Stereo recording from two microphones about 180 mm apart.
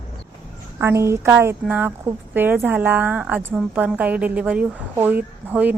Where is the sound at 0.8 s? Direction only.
15° right (ahead or behind).